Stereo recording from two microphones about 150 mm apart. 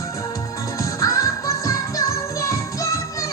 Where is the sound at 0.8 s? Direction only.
20° left (ahead or behind).